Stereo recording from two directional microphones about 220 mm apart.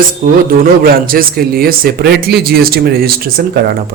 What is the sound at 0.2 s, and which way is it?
A man's voice, 40° right (ahead or behind).